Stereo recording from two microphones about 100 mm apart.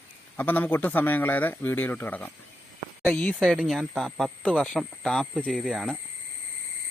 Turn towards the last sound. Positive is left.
turn(degrees=0)  # may be behind; listen again after turning